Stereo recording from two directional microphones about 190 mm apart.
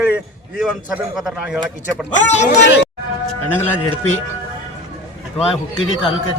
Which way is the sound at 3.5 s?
10° left (ahead or behind).